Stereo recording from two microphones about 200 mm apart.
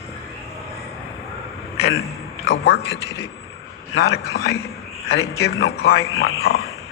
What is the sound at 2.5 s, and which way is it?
Speech, 55° left (ahead or behind).